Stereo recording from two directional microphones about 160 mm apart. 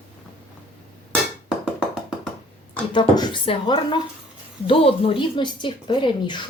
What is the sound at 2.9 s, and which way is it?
Speech, 30° left (ahead or behind).